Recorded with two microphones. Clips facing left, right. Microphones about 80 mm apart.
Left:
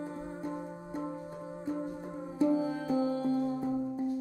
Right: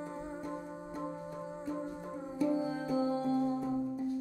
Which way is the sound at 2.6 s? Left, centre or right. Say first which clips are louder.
Left 2 dB; centre.